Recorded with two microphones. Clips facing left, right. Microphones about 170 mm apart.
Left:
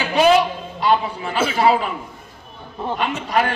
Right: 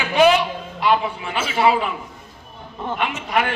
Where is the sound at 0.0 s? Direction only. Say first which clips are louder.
Even; 35° left (ahead or behind).